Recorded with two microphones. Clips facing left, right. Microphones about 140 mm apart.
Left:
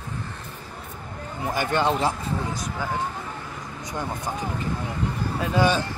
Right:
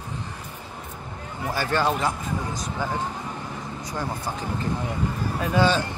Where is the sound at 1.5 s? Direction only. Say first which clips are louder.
Left 1 dB; 20° left (ahead or behind).